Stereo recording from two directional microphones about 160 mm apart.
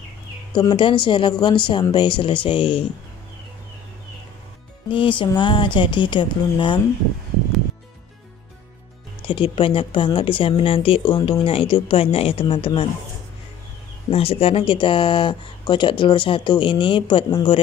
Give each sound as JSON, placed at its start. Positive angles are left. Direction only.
{"t": 0.6, "sound": "speech", "side_deg": 30}
{"t": 4.9, "sound": "speech", "side_deg": 30}
{"t": 9.2, "sound": "speech", "side_deg": 30}
{"t": 14.1, "sound": "speech", "side_deg": 40}